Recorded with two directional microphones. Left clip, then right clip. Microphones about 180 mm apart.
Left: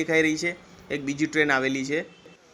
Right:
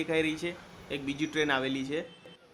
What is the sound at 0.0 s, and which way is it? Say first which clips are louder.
Speech: left 7 dB; 15° left (ahead or behind).